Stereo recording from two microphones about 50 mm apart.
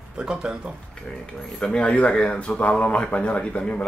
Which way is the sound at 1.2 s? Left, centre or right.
Centre.